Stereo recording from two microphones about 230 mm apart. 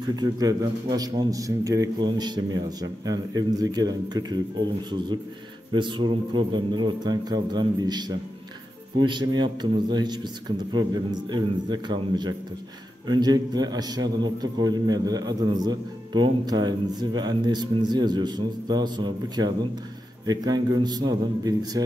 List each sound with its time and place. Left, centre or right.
0.1 s a man's voice: centre
5.7 s a man's voice: right